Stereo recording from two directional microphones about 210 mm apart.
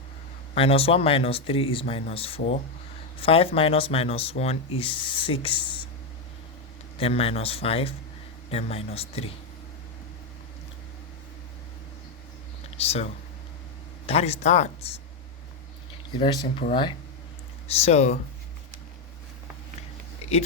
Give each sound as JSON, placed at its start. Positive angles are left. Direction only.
{"t": 0.5, "sound": "speech", "side_deg": 25}
{"t": 7.0, "sound": "speech", "side_deg": 30}
{"t": 12.7, "sound": "speech", "side_deg": 30}
{"t": 14.1, "sound": "speech", "side_deg": 30}
{"t": 16.2, "sound": "speech", "side_deg": 20}
{"t": 17.7, "sound": "speech", "side_deg": 30}